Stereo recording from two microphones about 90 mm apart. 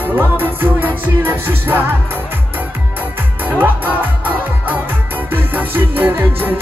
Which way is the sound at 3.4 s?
20° right (ahead or behind).